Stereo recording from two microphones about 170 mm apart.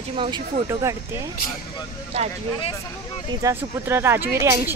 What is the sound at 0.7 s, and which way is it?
Speech, 15° right (ahead or behind).